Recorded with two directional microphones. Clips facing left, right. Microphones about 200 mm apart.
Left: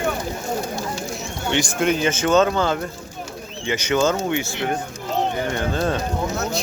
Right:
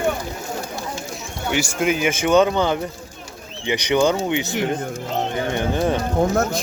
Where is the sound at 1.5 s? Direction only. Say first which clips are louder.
Even; 5° right (ahead or behind).